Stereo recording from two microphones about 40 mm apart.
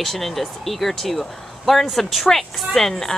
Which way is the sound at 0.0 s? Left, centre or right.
Centre.